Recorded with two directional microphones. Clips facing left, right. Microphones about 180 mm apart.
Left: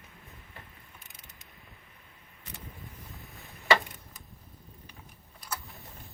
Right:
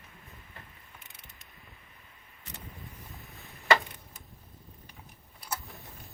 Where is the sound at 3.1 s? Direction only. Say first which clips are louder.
Even; centre (ahead or behind).